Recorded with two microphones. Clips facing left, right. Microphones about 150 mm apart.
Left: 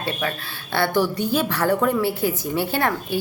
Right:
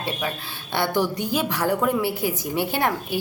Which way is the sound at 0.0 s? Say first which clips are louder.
Left 2 dB; 15° right (ahead or behind).